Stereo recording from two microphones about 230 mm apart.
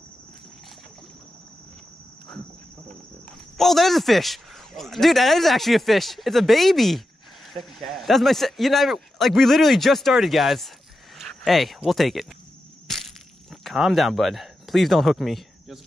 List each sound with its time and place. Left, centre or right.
3.5 s speech: centre
13.5 s speech: centre